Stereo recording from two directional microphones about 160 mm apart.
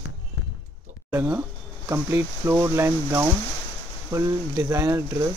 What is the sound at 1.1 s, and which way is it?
Speech, 15° right (ahead or behind).